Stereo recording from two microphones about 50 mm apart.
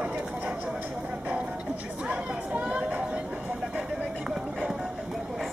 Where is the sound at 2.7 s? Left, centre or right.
Centre.